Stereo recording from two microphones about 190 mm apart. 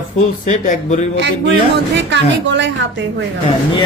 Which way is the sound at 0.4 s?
40° left (ahead or behind).